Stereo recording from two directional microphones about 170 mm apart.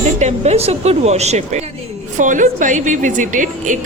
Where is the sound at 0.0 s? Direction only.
40° right (ahead or behind).